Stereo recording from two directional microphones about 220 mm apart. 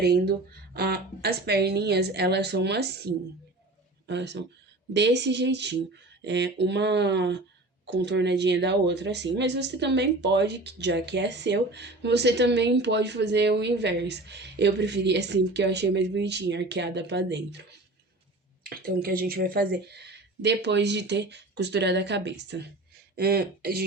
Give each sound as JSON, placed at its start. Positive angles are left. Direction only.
{"t": 0.0, "sound": "speech", "side_deg": -45}
{"t": 18.6, "sound": "speech", "side_deg": -40}